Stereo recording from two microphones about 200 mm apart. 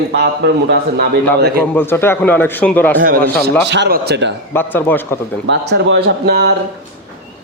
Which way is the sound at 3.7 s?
60° right (ahead or behind).